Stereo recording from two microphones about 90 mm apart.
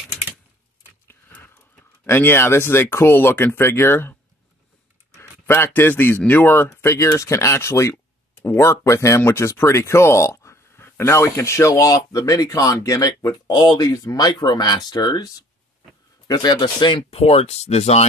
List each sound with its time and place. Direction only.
2.0 s speech: 25° left (ahead or behind); by 15.2 s 50° left (ahead or behind)
16.3 s speech: 55° left (ahead or behind); by 17.4 s 80° left